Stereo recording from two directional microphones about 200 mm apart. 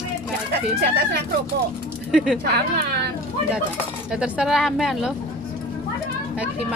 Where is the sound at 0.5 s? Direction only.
55° right (ahead or behind).